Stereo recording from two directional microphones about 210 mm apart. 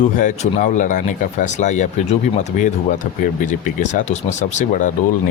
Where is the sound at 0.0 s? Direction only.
35° left (ahead or behind).